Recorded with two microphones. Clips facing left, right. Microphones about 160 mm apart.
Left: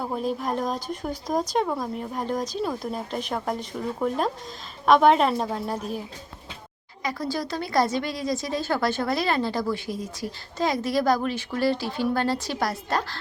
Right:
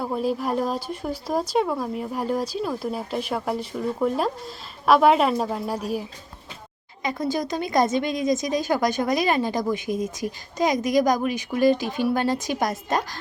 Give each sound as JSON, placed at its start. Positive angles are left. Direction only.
{"t": 0.0, "sound": "speech", "side_deg": -5}
{"t": 7.0, "sound": "speech", "side_deg": -20}